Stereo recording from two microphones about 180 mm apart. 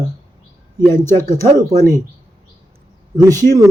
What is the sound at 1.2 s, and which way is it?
Speech, 15° left (ahead or behind).